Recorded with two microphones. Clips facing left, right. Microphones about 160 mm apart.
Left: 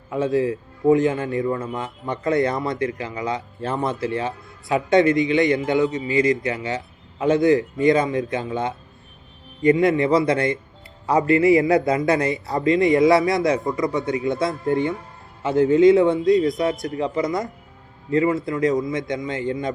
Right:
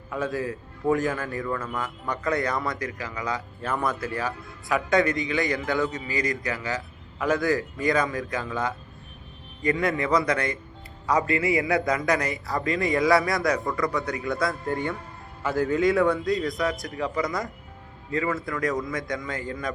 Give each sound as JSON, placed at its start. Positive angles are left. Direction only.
{"t": 0.1, "sound": "a man's voice", "side_deg": 20}